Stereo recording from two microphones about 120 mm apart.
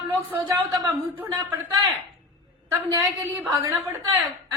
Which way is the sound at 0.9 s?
20° right (ahead or behind).